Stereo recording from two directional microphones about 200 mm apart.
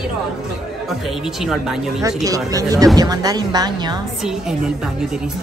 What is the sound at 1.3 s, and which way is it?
Speech, centre (ahead or behind).